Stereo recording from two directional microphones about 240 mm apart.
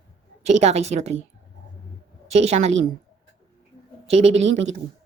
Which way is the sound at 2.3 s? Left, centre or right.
Right.